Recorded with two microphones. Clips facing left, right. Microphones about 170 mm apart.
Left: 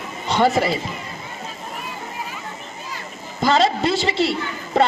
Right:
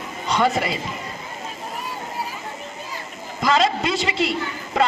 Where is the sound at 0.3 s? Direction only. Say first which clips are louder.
Left 3 dB; 30° left (ahead or behind).